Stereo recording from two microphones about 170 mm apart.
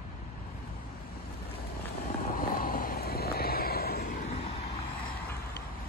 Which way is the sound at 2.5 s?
55° left (ahead or behind).